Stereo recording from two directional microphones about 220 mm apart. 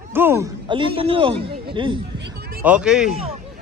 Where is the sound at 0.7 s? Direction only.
25° right (ahead or behind).